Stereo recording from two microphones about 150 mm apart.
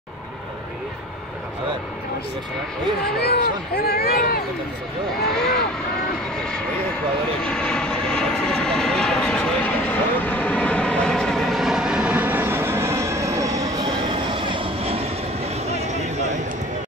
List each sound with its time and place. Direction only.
3.2 s speech: 90° left
5.3 s speech: 5° left (ahead or behind)
7.4 s vehicle: 5° left (ahead or behind); by 15.0 s 40° right (ahead or behind)